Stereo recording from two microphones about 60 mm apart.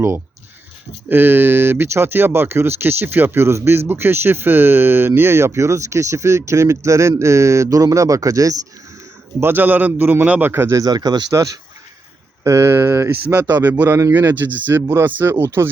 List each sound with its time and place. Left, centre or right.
1.1 s speech: right
9.4 s a man's voice: right
10.8 s speech: right
12.4 s speech: right
12.7 s a man's voice: right